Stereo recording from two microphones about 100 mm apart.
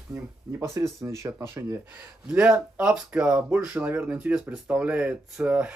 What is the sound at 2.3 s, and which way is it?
Speech, 10° right (ahead or behind).